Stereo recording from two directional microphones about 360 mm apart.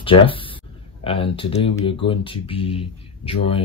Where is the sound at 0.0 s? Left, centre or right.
Centre.